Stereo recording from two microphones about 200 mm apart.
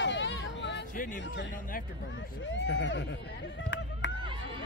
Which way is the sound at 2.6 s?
65° left (ahead or behind).